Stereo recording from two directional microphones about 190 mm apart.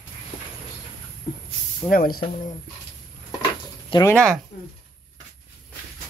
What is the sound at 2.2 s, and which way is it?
Speech, 35° left (ahead or behind).